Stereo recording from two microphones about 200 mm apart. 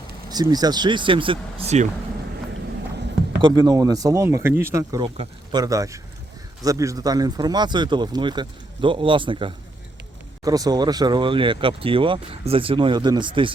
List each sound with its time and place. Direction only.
0.3 s speech: 20° right (ahead or behind)
3.4 s speech: 20° right (ahead or behind)